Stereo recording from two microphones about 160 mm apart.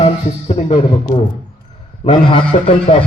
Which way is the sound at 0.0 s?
40° left (ahead or behind).